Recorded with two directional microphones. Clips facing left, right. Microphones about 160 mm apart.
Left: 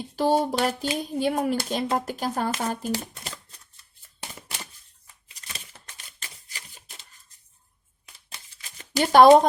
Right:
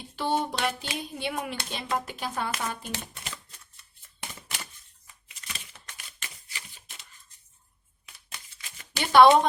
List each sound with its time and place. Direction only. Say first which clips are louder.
0.2 s speech: left 6 dB; 40° left (ahead or behind)
4.2 s a sound: left 1 dB; 35° left (ahead or behind)
8.8 s speech: left 2 dB; 40° left (ahead or behind)